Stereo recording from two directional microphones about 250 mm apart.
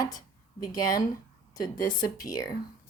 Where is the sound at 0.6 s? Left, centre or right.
Centre.